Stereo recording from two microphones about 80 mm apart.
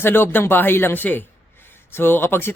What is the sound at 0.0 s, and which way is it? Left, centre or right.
A man's voice, left.